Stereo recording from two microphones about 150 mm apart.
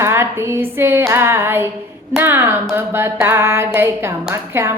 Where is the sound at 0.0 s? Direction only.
15° right (ahead or behind).